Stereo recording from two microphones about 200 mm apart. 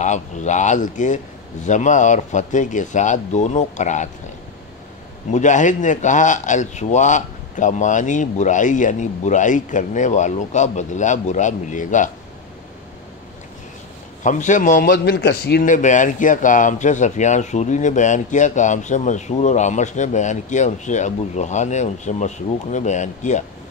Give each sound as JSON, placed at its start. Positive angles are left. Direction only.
{"t": 0.0, "sound": "a man's voice", "side_deg": 35}
{"t": 5.3, "sound": "a man's voice", "side_deg": 40}
{"t": 14.2, "sound": "a man's voice", "side_deg": 40}